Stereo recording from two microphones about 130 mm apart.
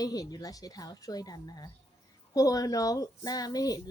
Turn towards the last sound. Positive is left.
turn(degrees=30)  # may be behind; listen again after turning